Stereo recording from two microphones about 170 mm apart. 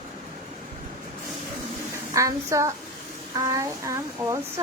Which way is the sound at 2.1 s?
20° right (ahead or behind).